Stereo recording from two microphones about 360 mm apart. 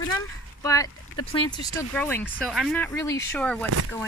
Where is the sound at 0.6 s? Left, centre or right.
Centre.